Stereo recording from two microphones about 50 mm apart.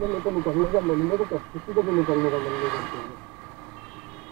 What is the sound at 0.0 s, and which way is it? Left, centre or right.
Speech, centre.